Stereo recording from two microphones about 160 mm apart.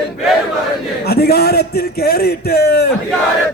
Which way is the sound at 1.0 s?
75° left (ahead or behind).